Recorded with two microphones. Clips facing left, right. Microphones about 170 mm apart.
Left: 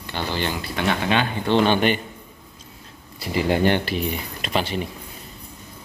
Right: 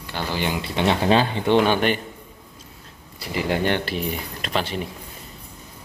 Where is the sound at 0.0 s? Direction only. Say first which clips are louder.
Even; 5° right (ahead or behind).